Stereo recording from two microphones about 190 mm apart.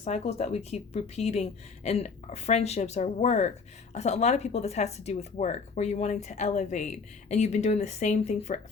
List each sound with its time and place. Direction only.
0.0 s speech: 35° left (ahead or behind)